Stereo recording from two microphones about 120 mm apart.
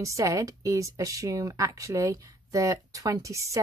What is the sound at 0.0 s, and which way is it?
Speech, 25° right (ahead or behind).